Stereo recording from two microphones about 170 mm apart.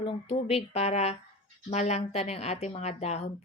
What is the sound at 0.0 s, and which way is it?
Speech, 35° left (ahead or behind).